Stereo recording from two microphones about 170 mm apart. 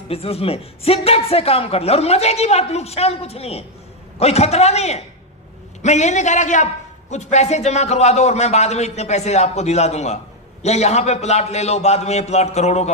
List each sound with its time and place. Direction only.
0.1 s a man's voice: 35° left (ahead or behind)